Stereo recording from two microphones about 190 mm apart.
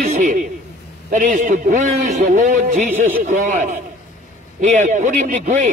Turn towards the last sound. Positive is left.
turn(degrees=-40)  # may be behind; listen again after turning